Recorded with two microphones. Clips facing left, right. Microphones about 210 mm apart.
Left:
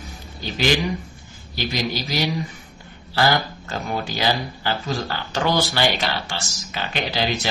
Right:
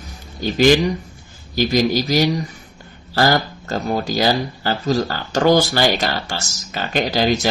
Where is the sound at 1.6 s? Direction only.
45° right (ahead or behind).